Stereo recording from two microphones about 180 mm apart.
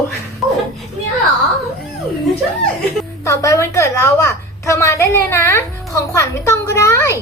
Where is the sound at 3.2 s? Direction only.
15° left (ahead or behind).